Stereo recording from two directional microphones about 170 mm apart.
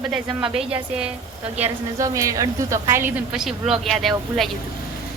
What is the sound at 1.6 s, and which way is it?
A woman's voice, 20° right (ahead or behind).